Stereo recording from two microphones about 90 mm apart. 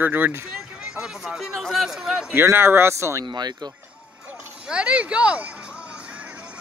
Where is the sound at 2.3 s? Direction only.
30° right (ahead or behind).